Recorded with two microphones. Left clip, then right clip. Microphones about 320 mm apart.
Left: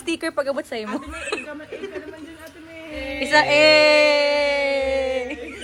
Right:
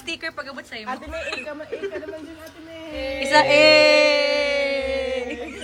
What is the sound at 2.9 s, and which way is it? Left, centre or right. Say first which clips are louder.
Speech: right 2 dB; right.